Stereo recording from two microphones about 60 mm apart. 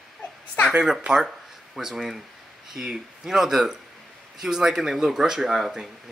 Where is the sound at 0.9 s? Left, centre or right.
Centre.